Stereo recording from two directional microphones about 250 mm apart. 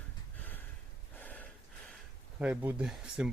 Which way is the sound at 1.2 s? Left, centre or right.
Centre.